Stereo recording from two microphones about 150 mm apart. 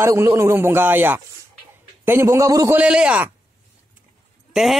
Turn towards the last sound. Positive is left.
turn(degrees=0)  # may be behind; listen again after turning